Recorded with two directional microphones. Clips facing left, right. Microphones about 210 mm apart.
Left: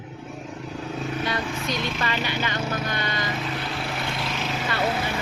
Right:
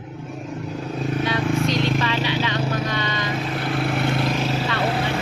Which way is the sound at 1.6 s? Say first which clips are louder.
Right 6 dB; centre (ahead or behind).